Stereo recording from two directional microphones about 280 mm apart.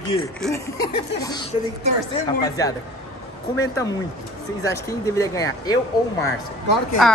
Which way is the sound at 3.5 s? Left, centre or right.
Centre.